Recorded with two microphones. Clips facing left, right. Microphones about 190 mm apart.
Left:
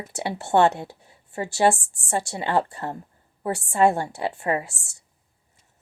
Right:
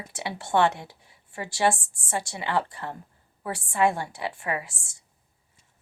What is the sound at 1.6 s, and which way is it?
Speech, 35° left (ahead or behind).